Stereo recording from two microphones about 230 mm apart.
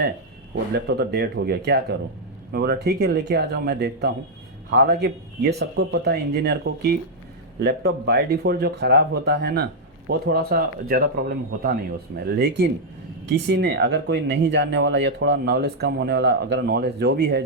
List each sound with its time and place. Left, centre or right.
0.7 s speech: right